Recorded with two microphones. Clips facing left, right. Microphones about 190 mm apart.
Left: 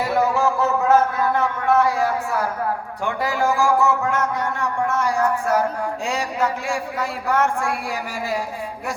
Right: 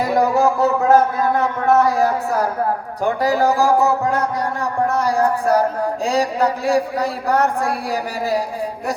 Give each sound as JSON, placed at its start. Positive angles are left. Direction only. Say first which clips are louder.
{"t": 0.1, "sound": "a man's voice", "louder": "right 4 dB", "side_deg": -40}